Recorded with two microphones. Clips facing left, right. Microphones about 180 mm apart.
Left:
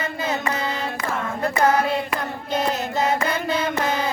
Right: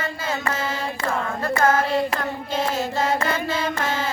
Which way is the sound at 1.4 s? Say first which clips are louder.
Left 1 dB; 20° left (ahead or behind).